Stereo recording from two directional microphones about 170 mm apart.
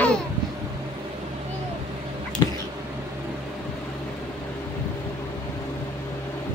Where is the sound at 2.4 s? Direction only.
25° left (ahead or behind).